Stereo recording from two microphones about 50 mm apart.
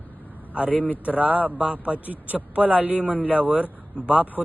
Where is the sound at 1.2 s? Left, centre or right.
Right.